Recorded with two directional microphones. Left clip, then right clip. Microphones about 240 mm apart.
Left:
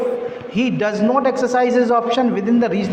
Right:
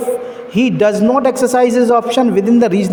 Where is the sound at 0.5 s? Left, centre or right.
Right.